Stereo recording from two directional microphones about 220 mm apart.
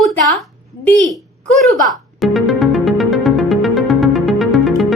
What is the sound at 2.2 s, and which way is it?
Music, centre (ahead or behind).